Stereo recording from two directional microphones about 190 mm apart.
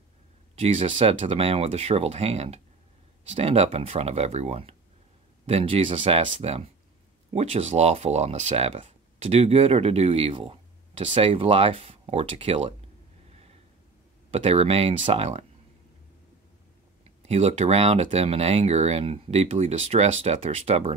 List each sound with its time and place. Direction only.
0.6 s speech: 30° right (ahead or behind)
14.3 s speech: 30° right (ahead or behind)
17.2 s speech: 35° right (ahead or behind)